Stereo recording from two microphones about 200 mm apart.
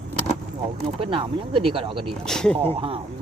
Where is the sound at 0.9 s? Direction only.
25° right (ahead or behind).